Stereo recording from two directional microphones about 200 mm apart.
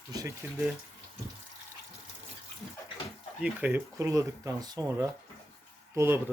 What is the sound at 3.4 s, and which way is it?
Speech, 10° right (ahead or behind).